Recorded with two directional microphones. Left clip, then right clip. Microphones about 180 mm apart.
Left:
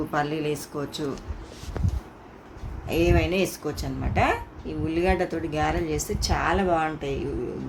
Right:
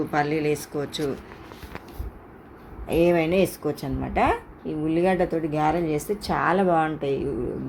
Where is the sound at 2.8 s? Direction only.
20° right (ahead or behind).